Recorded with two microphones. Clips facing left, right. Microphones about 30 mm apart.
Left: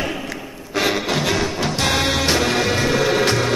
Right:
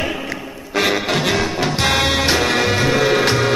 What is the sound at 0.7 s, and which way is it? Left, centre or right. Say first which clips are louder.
Music: right 2 dB; centre.